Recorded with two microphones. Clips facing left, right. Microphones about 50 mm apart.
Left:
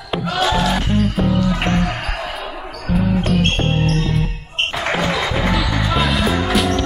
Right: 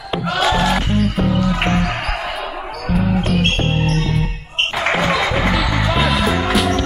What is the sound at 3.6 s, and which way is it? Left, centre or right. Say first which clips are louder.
Music: even; centre.